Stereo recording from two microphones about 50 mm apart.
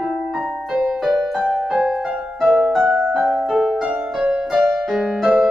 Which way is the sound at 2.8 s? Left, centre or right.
Right.